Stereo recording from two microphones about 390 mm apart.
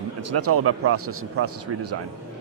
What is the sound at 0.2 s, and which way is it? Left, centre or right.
Speech, right.